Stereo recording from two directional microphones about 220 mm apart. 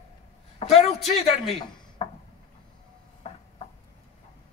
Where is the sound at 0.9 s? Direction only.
Centre (ahead or behind).